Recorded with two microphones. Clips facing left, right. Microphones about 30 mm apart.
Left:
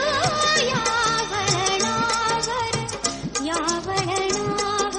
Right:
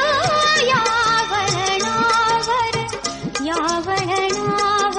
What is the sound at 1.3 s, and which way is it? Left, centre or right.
Music of bollywood, centre.